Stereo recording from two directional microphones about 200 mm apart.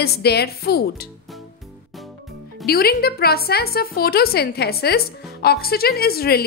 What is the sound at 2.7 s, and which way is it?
A woman's voice, 50° left (ahead or behind).